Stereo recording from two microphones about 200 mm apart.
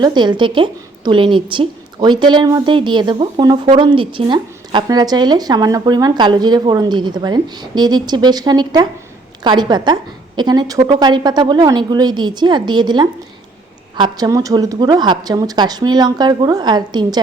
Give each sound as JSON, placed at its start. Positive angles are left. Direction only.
{"t": 0.0, "sound": "a woman's voice", "side_deg": -20}